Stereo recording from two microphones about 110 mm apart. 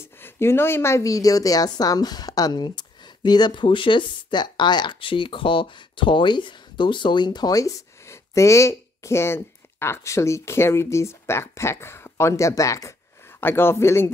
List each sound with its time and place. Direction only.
0.0 s a woman's voice: 20° left (ahead or behind)